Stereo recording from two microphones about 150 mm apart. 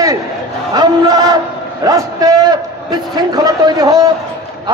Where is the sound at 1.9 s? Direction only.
25° right (ahead or behind).